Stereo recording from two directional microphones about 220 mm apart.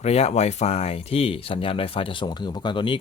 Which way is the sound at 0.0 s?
30° left (ahead or behind).